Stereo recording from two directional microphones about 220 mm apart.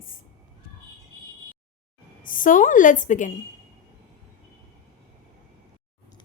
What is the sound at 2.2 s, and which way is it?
Speech, 40° left (ahead or behind).